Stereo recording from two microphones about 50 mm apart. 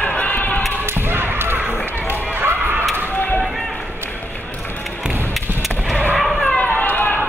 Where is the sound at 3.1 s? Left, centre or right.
Left.